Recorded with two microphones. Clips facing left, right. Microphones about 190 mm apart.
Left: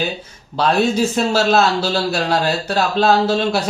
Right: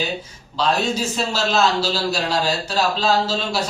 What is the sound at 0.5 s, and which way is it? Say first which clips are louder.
A man's voice: left 5 dB; 60° left (ahead or behind).